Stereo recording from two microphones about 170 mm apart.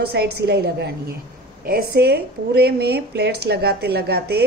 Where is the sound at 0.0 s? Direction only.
70° right (ahead or behind).